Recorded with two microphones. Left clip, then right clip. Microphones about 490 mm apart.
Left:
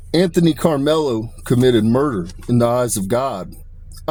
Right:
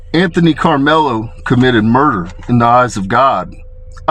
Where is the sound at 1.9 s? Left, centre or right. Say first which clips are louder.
Right 7 dB; centre.